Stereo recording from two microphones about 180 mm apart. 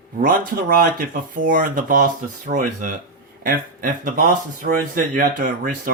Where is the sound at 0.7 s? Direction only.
50° right (ahead or behind).